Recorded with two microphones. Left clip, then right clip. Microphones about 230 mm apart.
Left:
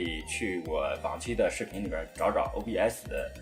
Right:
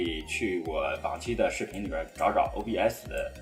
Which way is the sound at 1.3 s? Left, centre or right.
Left.